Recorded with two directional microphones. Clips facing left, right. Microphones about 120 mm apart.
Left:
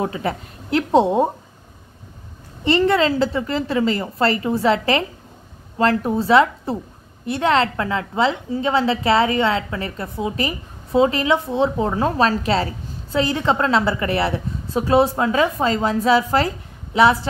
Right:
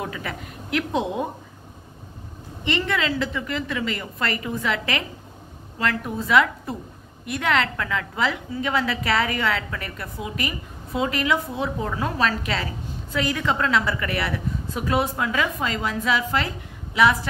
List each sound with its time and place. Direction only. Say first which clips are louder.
0.0 s a woman's voice: left 8 dB; 30° left (ahead or behind)
2.6 s a woman's voice: left 8 dB; 35° left (ahead or behind)